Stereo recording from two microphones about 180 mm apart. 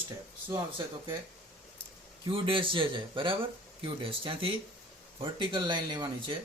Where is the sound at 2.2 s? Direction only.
30° right (ahead or behind).